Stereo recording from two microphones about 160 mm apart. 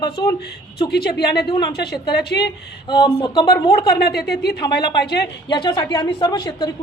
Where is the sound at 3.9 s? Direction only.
75° left (ahead or behind).